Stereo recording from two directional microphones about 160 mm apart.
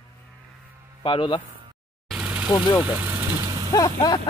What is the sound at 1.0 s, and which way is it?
Speech, 30° left (ahead or behind).